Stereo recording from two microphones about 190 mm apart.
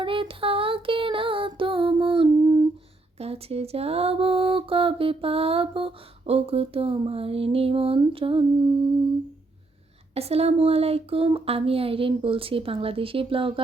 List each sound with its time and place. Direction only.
0.0 s music: 25° right (ahead or behind)
3.2 s mantra: 30° right (ahead or behind)
10.2 s mantra: 30° right (ahead or behind)